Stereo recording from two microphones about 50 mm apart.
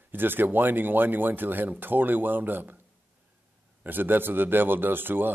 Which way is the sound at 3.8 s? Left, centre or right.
Right.